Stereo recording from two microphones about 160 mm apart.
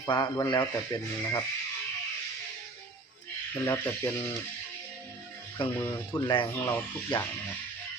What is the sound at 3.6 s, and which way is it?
Speech, 15° left (ahead or behind).